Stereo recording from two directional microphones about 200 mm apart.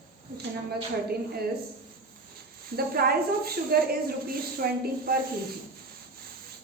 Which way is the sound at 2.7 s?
50° right (ahead or behind).